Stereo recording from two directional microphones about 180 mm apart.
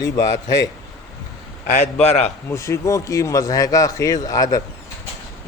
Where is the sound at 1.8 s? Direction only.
35° left (ahead or behind).